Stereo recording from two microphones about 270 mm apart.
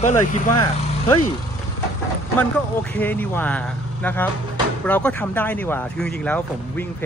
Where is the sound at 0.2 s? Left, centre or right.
Centre.